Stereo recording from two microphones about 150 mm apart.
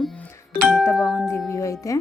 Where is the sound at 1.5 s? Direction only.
20° left (ahead or behind).